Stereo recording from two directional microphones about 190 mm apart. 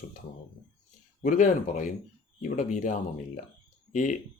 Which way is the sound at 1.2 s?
40° left (ahead or behind).